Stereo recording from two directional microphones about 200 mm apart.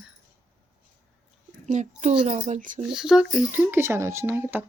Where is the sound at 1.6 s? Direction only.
35° right (ahead or behind).